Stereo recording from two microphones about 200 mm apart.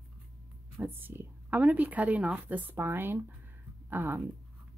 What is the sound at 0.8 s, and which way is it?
Speech, 10° right (ahead or behind).